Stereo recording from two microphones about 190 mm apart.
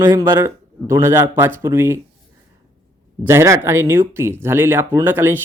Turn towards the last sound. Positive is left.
turn(degrees=-10)  # may be behind; listen again after turning